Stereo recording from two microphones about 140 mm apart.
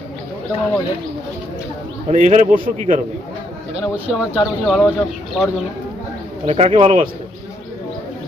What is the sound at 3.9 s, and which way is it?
Speech, 10° right (ahead or behind).